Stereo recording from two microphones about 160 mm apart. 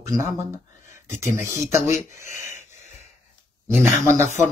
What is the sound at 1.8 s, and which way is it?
Speech, 50° left (ahead or behind).